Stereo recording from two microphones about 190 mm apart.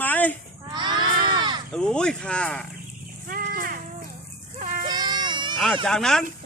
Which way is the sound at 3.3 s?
50° right (ahead or behind).